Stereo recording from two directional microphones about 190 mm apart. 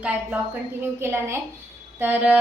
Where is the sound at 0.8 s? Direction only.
10° right (ahead or behind).